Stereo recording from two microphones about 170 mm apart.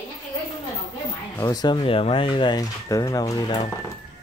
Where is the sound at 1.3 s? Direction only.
20° left (ahead or behind).